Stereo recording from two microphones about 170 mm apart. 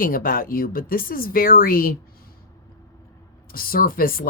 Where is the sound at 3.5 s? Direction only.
60° left (ahead or behind).